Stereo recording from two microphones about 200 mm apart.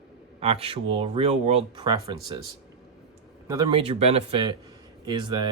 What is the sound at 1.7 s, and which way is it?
Speech, 20° right (ahead or behind).